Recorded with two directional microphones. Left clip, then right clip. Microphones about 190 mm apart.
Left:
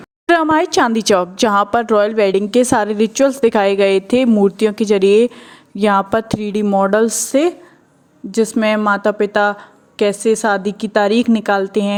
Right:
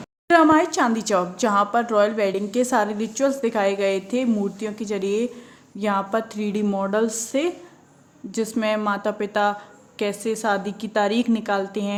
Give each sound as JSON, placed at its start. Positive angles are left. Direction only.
{"t": 0.3, "sound": "a woman's voice", "side_deg": 50}